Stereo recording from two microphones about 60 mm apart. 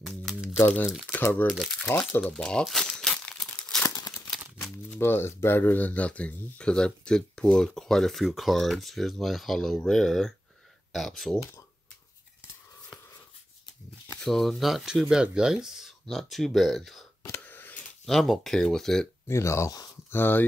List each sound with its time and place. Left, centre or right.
0.6 s speech: left
1.9 s speech: left
2.2 s speech: centre
2.6 s speech: centre
2.9 s crumpling: centre
3.8 s crumpling: left
4.9 s speech: left; by 11.3 s centre
14.2 s speech: centre
17.4 s a sound: left
18.0 s speech: centre
19.2 s speech: left
20.1 s speech: left